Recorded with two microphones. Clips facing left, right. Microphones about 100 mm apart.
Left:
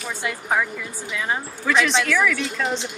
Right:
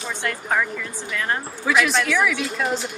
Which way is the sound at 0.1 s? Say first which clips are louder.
Even; 10° left (ahead or behind).